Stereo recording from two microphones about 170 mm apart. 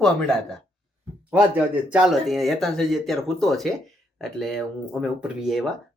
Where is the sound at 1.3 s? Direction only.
10° right (ahead or behind).